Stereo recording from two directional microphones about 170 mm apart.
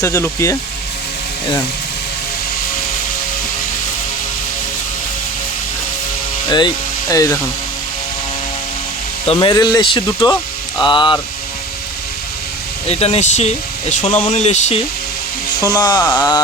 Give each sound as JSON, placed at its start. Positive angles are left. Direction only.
{"t": 0.0, "sound": "speech", "side_deg": 15}
{"t": 7.1, "sound": "speech", "side_deg": 20}
{"t": 9.2, "sound": "speech", "side_deg": 30}
{"t": 12.9, "sound": "speech", "side_deg": 40}
{"t": 15.6, "sound": "speech", "side_deg": 25}